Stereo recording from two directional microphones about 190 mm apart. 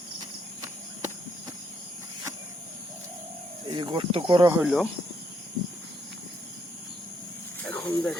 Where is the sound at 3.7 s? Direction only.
25° right (ahead or behind).